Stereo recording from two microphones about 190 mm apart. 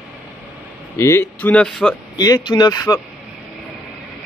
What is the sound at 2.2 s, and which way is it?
Speech, 20° left (ahead or behind).